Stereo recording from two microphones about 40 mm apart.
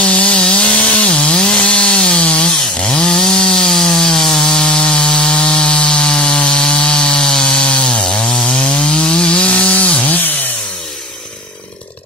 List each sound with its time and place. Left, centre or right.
0.0 s chainsaw: left